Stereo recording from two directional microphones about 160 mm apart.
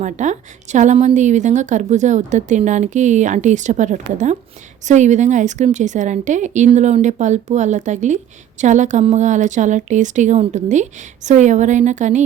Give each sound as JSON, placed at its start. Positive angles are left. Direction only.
{"t": 0.0, "sound": "a woman's voice", "side_deg": -50}